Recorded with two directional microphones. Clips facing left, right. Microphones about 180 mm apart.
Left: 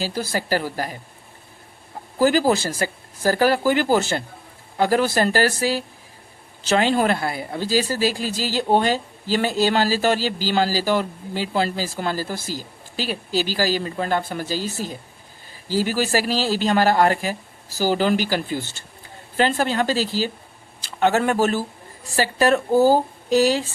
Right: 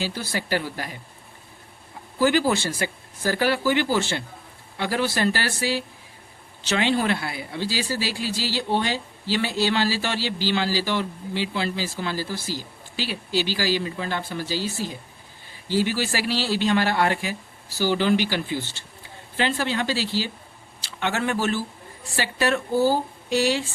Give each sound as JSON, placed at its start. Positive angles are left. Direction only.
{"t": 0.0, "sound": "speech", "side_deg": 40}
{"t": 2.1, "sound": "speech", "side_deg": 40}